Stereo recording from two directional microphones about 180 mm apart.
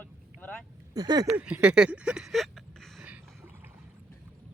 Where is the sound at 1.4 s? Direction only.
5° right (ahead or behind).